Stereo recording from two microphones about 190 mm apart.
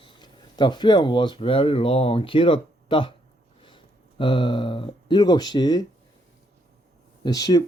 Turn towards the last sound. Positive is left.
turn(degrees=20)  # may be behind; listen again after turning